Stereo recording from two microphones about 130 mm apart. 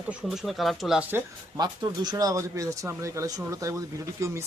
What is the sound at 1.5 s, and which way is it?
Speech, 30° right (ahead or behind).